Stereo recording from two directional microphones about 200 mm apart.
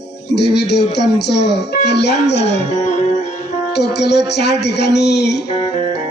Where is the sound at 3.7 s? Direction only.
55° left (ahead or behind).